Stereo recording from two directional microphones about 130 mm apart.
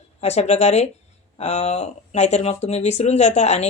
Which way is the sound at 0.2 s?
55° left (ahead or behind).